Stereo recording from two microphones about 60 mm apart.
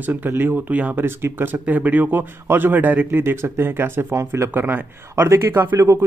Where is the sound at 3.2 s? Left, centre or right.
Right.